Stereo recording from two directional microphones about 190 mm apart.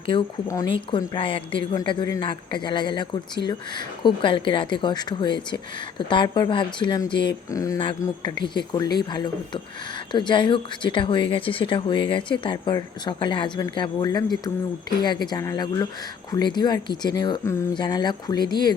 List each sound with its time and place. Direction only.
0.1 s speech: 20° left (ahead or behind)